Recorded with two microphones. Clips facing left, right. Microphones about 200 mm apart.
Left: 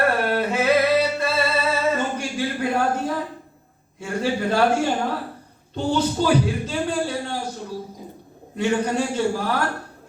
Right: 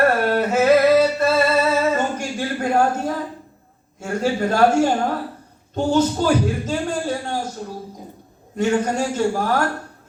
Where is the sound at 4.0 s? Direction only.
45° right (ahead or behind).